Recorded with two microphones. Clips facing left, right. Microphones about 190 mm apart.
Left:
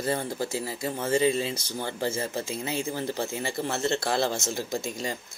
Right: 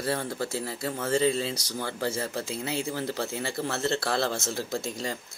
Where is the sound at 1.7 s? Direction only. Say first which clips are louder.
Left 1 dB; 20° left (ahead or behind).